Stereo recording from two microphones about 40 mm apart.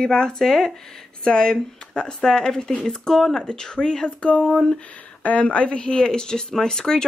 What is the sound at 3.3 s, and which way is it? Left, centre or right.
Speech, centre.